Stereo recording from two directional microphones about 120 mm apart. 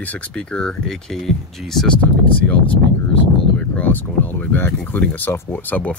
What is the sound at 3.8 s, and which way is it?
Speech, 15° left (ahead or behind).